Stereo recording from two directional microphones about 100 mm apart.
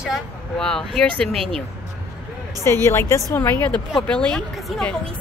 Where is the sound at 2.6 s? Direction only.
25° left (ahead or behind).